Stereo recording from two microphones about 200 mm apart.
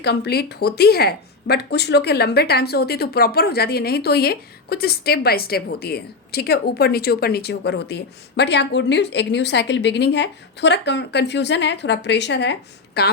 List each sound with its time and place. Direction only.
0.0 s speech: 55° left (ahead or behind)